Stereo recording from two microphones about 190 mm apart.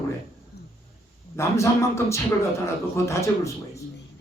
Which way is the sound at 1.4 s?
15° left (ahead or behind).